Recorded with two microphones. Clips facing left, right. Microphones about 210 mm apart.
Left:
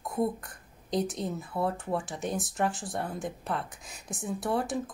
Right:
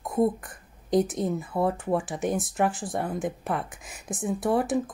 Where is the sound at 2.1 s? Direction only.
55° right (ahead or behind).